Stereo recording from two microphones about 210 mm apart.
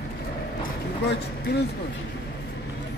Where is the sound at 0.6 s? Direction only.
50° left (ahead or behind).